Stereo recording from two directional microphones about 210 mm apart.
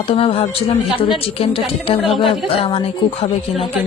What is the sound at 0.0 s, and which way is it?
Speech, 25° left (ahead or behind).